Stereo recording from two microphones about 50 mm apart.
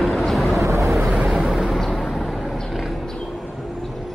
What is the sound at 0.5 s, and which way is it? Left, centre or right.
Vehicle, right.